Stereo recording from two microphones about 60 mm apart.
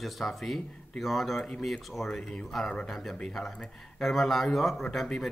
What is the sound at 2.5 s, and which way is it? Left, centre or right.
Speech, centre.